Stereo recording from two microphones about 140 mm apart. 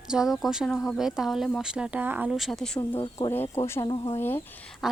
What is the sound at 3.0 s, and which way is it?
Speech, 40° left (ahead or behind).